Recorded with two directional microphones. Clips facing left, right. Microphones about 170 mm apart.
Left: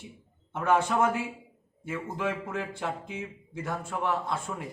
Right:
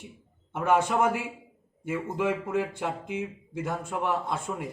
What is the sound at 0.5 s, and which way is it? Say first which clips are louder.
Speech: right 1 dB; 10° right (ahead or behind).